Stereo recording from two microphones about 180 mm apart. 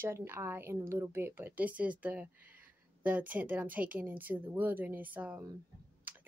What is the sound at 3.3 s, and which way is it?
A woman's voice, 10° right (ahead or behind).